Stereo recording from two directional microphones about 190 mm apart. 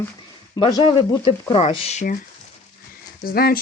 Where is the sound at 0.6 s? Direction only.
25° left (ahead or behind).